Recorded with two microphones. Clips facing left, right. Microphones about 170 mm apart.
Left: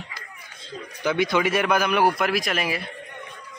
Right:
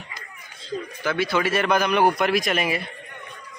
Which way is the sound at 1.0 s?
15° left (ahead or behind).